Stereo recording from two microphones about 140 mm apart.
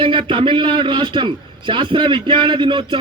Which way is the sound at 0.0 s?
35° right (ahead or behind).